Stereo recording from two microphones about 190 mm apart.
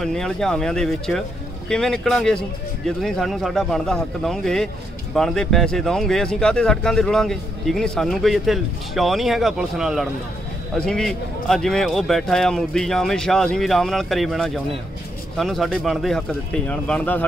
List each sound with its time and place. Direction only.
0.0 s speech: 5° left (ahead or behind)